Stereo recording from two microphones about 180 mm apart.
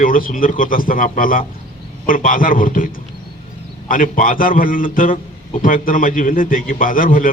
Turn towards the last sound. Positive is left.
turn(degrees=50)  # may be behind; listen again after turning